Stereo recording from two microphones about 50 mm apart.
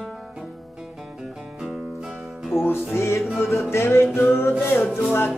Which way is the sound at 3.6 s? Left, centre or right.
Left.